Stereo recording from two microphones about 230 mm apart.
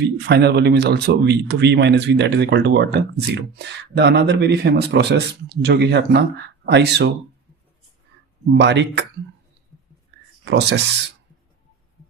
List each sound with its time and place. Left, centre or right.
0.0 s a man's voice: right
8.5 s a man's voice: right
10.4 s a man's voice: right